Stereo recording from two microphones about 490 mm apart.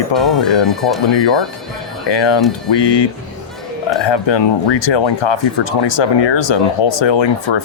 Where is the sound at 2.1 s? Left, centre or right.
Left.